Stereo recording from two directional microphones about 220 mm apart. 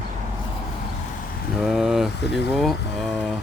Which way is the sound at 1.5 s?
Centre (ahead or behind).